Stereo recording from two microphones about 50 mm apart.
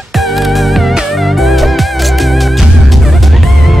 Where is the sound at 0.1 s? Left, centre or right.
Centre.